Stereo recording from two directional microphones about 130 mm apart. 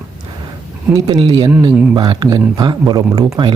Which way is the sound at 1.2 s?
45° right (ahead or behind).